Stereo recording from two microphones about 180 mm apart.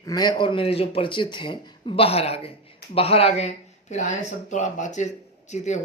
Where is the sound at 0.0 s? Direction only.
20° left (ahead or behind).